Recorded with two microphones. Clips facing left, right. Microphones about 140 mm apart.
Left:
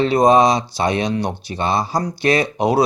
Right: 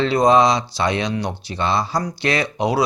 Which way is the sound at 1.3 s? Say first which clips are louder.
Left 1 dB; 20° left (ahead or behind).